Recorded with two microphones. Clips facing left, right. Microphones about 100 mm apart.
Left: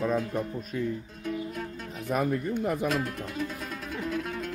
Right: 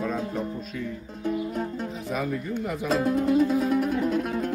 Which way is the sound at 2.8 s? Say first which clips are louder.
Right 7 dB; 15° right (ahead or behind).